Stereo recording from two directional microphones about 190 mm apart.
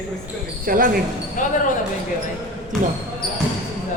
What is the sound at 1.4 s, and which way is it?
Speech, 45° left (ahead or behind).